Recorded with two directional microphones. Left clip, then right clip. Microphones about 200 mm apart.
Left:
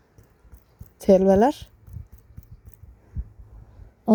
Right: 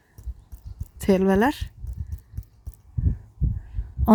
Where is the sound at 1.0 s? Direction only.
25° right (ahead or behind).